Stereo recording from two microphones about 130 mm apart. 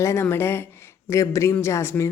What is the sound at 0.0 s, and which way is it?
A woman's voice, 20° left (ahead or behind).